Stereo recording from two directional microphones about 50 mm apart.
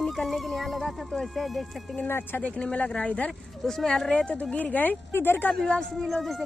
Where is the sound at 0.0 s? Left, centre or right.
Centre.